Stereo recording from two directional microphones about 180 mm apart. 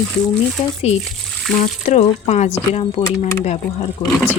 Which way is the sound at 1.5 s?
40° left (ahead or behind).